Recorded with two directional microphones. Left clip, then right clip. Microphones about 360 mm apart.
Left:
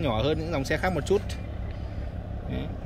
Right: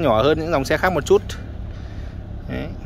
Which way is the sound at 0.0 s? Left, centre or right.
Centre.